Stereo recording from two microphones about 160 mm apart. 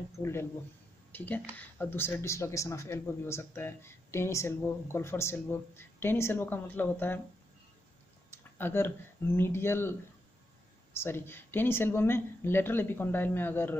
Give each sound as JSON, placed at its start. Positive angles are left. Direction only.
{"t": 0.2, "sound": "speech", "side_deg": 15}
{"t": 8.5, "sound": "speech", "side_deg": 15}